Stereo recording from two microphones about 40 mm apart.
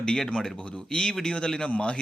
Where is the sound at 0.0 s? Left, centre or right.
Centre.